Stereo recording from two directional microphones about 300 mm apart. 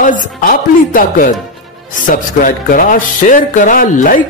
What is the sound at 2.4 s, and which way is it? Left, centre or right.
A woman's voice, left.